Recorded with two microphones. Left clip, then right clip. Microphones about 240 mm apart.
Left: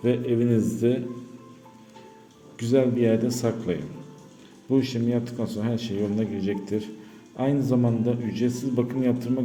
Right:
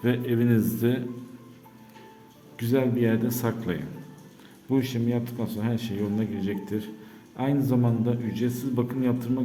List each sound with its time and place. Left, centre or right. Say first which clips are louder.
0.0 s speech: left 2 dB; centre
2.6 s a man's voice: left 3 dB; centre